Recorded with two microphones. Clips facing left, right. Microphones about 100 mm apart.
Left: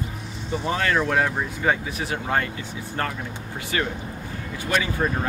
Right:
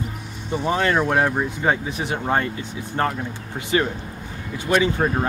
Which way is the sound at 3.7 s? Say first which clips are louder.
Right 5 dB; 25° right (ahead or behind).